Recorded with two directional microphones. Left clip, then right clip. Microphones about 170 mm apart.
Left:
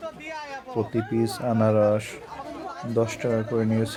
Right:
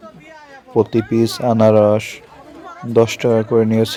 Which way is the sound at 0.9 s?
40° right (ahead or behind).